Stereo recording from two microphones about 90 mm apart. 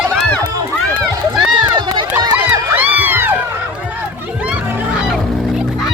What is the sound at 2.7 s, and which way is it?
Crowd, 20° right (ahead or behind).